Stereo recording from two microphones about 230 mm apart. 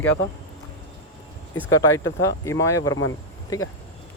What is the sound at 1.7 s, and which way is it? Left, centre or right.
A man's voice, centre.